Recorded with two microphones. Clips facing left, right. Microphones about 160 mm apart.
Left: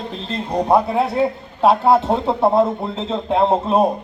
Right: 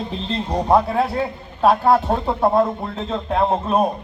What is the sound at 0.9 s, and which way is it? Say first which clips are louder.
A man's voice: left 3 dB; 25° left (ahead or behind).